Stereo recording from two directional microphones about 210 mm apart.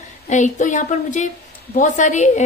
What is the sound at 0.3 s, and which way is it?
A woman's voice, 35° left (ahead or behind).